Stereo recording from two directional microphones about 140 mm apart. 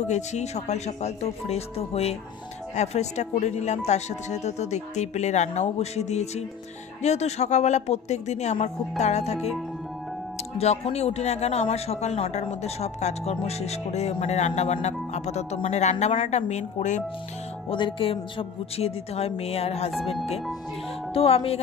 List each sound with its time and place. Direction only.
0.1 s a man's voice: 55° left (ahead or behind)
10.6 s a man's voice: 50° left (ahead or behind)
17.6 s a man's voice: 35° left (ahead or behind)
21.1 s a man's voice: 45° left (ahead or behind)